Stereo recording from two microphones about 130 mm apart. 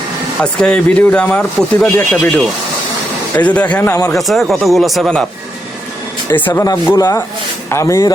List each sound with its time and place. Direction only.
0.6 s speech: 10° left (ahead or behind)
3.3 s speech: 10° left (ahead or behind)
4.1 s speech: centre (ahead or behind)
6.5 s speech: 25° left (ahead or behind)